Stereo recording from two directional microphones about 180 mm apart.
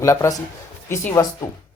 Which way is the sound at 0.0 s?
15° left (ahead or behind).